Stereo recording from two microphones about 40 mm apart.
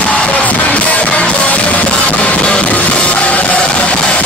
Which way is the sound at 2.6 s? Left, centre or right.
Left.